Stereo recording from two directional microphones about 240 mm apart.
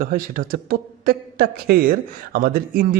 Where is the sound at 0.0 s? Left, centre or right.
Right.